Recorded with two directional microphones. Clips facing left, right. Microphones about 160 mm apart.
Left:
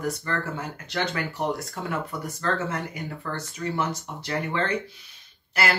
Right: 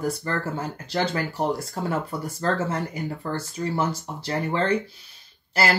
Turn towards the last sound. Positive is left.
turn(degrees=-30)  # may be behind; listen again after turning